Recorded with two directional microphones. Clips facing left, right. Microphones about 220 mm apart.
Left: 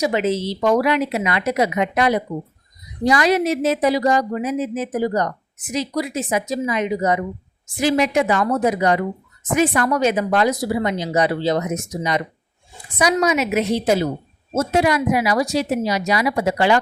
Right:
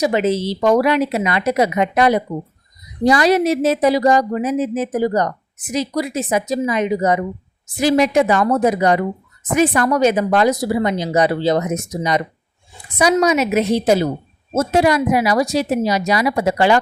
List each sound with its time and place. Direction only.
0.0 s a woman's voice: 35° right (ahead or behind)